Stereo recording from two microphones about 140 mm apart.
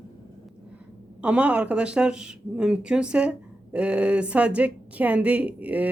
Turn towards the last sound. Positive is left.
turn(degrees=-10)  # may be behind; listen again after turning